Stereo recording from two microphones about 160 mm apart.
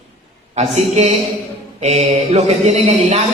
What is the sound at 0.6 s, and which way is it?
A man's voice, 40° right (ahead or behind).